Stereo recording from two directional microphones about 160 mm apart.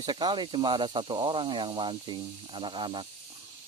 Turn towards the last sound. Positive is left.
turn(degrees=-30)  # may be behind; listen again after turning